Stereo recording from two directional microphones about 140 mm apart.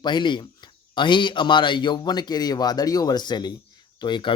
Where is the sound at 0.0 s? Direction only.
35° left (ahead or behind).